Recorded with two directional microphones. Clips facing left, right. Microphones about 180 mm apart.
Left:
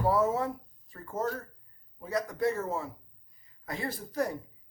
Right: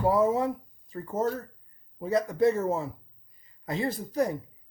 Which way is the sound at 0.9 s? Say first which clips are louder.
Right 5 dB; 20° right (ahead or behind).